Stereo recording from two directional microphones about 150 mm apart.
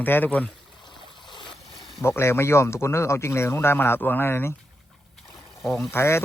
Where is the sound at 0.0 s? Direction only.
10° left (ahead or behind).